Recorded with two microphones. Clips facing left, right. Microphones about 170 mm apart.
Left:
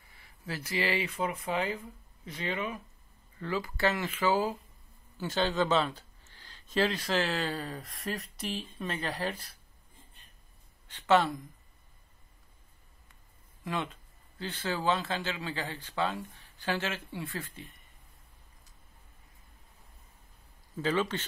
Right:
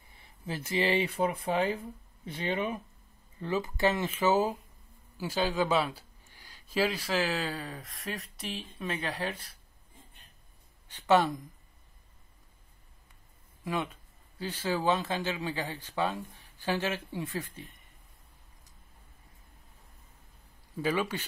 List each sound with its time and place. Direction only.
0.1 s speech: 20° right (ahead or behind)
3.3 s speech: 20° right (ahead or behind)
5.1 s speech: 10° right (ahead or behind)
10.9 s speech: 15° right (ahead or behind)
14.4 s speech: 10° right (ahead or behind)
20.7 s speech: 10° right (ahead or behind)